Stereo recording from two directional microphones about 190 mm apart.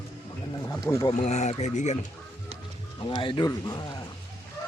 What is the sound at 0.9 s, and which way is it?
Speech, 15° left (ahead or behind).